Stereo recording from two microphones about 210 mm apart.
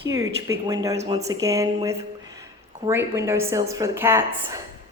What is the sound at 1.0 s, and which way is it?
Speech, 30° right (ahead or behind).